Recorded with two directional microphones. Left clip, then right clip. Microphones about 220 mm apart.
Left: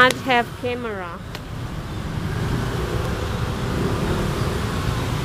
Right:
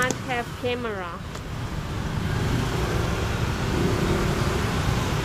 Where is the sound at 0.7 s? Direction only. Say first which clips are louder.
Left 1 dB; 5° left (ahead or behind).